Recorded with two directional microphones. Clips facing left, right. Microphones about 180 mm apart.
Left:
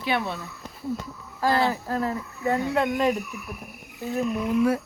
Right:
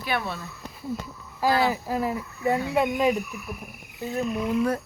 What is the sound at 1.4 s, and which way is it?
Speech, 10° right (ahead or behind).